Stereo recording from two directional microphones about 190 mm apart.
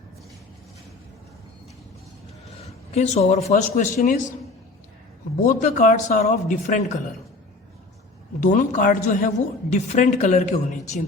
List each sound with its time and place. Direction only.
2.6 s a woman's voice: 35° left (ahead or behind)
5.4 s speech: 40° left (ahead or behind)
8.4 s a woman's voice: 40° left (ahead or behind)